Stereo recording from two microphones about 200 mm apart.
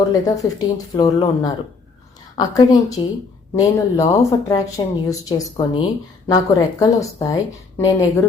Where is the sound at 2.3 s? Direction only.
20° left (ahead or behind).